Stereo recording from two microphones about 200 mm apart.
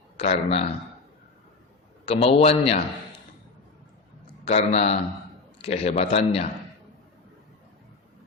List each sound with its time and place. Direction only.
0.2 s a man's voice: 30° left (ahead or behind)
2.0 s a man's voice: 30° left (ahead or behind)
4.4 s a man's voice: 30° left (ahead or behind)